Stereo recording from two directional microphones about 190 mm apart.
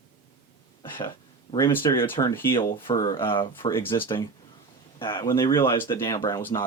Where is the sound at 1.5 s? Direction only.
25° left (ahead or behind).